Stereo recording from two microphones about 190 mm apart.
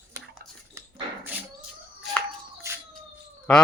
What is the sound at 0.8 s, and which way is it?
Dog, 15° right (ahead or behind).